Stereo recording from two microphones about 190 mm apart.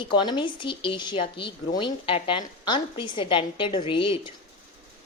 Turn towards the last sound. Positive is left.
turn(degrees=25)  # may be behind; listen again after turning